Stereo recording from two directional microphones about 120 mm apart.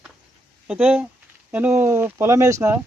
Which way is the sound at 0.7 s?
10° right (ahead or behind).